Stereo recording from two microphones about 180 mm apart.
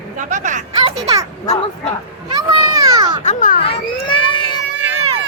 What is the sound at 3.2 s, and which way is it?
Children playing, 45° left (ahead or behind).